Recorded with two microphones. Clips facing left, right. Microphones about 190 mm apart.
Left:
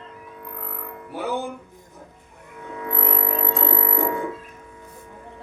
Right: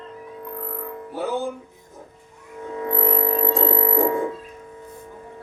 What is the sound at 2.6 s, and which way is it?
Music, 35° right (ahead or behind).